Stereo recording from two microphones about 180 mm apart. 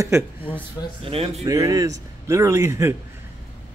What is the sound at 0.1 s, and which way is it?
Speech, 15° right (ahead or behind).